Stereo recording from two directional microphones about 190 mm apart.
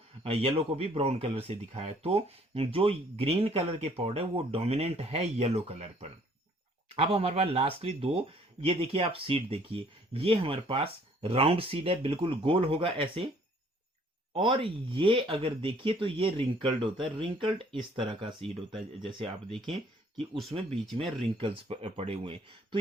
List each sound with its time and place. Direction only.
0.2 s speech: 30° right (ahead or behind)
14.3 s speech: 25° right (ahead or behind)